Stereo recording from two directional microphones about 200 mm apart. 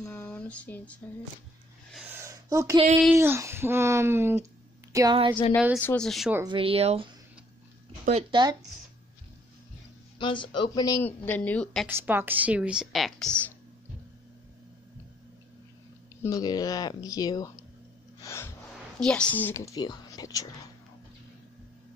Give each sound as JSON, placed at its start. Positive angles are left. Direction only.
{"t": 0.0, "sound": "a sound", "side_deg": 5}
{"t": 2.0, "sound": "a sound", "side_deg": -15}
{"t": 3.2, "sound": "speech", "side_deg": -15}
{"t": 5.8, "sound": "speech", "side_deg": 5}
{"t": 6.4, "sound": "speech", "side_deg": -25}
{"t": 10.1, "sound": "speech", "side_deg": 25}
{"t": 11.9, "sound": "speech", "side_deg": -10}
{"t": 16.2, "sound": "speech", "side_deg": 15}
{"t": 18.2, "sound": "music", "side_deg": 15}
{"t": 18.9, "sound": "speech", "side_deg": 5}